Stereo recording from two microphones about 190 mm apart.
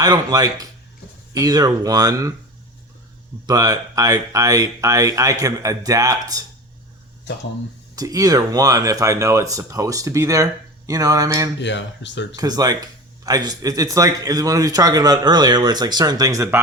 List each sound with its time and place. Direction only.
0.0 s speech: 20° right (ahead or behind)
3.4 s speech: 20° right (ahead or behind)
7.9 s speech: 20° right (ahead or behind)
11.6 s speech: 70° left (ahead or behind)
12.4 s speech: 20° right (ahead or behind)